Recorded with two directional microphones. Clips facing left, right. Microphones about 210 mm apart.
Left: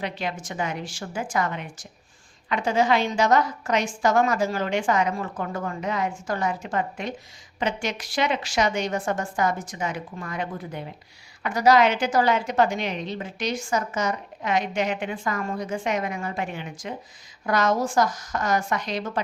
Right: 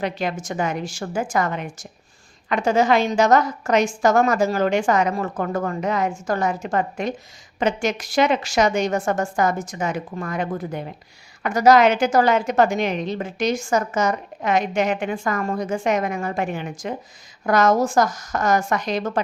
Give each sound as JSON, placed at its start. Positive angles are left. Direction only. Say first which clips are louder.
{"t": 0.0, "sound": "a woman's voice", "louder": "right 5 dB", "side_deg": -45}